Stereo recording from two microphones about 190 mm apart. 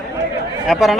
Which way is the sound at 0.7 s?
Centre (ahead or behind).